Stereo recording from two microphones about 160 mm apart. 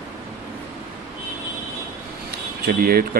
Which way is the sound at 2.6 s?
70° right (ahead or behind).